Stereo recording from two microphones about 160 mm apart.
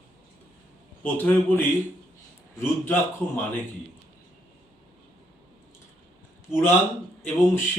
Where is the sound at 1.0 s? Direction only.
10° left (ahead or behind).